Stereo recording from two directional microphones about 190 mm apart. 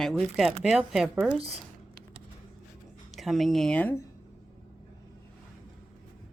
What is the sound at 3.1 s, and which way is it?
Speech, centre (ahead or behind).